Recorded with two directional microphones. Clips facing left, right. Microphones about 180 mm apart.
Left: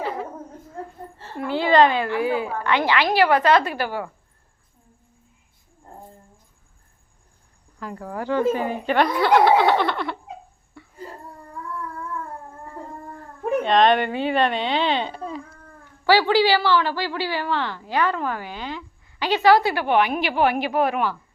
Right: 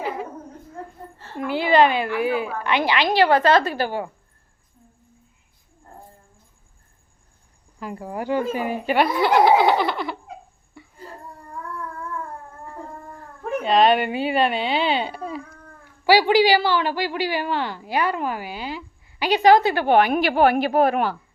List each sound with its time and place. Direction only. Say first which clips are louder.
1.4 s a woman's voice: even; 15° right (ahead or behind)
3.2 s a woman's voice: right 1 dB; 30° right (ahead or behind)
7.8 s a woman's voice: right 1 dB; 15° right (ahead or behind)
10.8 s a sound: even; centre (ahead or behind)
13.6 s a woman's voice: right 1 dB; 5° right (ahead or behind); by 19.9 s 25° right (ahead or behind)
19.9 s a woman's voice: right 4 dB; 40° right (ahead or behind)